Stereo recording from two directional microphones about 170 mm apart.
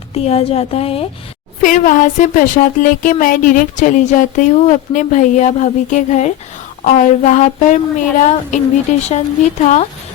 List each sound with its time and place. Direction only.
0.1 s speech: 40° left (ahead or behind)
1.6 s speech: 50° left (ahead or behind)